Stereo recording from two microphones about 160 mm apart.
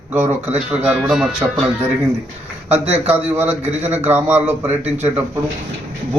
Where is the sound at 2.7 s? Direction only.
10° right (ahead or behind).